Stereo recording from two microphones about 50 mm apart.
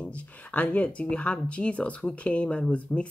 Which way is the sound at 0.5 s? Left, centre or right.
Left.